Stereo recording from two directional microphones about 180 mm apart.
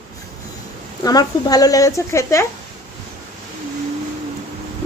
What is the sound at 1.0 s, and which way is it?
A woman's voice, 20° left (ahead or behind).